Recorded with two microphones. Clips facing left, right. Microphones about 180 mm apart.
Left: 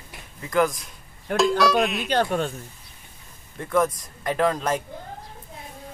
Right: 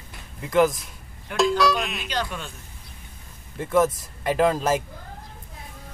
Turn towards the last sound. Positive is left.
turn(degrees=-5)  # may be behind; listen again after turning